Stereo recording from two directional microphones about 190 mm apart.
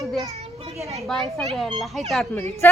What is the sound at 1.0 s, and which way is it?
A woman's voice, centre (ahead or behind).